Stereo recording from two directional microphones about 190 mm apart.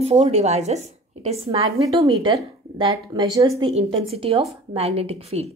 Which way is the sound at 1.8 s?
20° right (ahead or behind).